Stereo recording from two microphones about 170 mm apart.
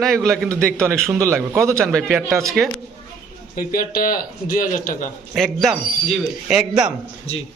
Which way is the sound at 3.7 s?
55° left (ahead or behind).